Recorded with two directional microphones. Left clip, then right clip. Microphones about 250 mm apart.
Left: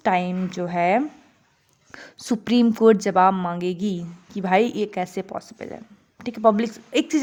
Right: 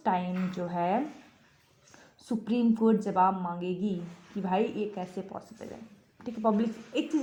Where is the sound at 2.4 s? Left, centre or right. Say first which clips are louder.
Left 10 dB; left.